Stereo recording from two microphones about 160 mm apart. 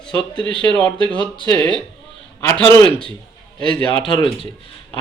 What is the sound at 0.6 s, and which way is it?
Speech, 10° left (ahead or behind).